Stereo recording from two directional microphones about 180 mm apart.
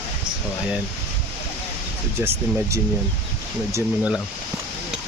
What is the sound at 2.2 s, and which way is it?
Speech, 15° right (ahead or behind).